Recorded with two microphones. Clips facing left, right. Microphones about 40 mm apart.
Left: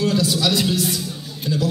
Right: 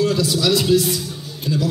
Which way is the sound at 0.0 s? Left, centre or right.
Left.